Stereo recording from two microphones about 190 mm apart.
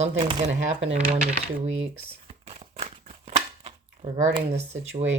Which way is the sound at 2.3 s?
35° right (ahead or behind).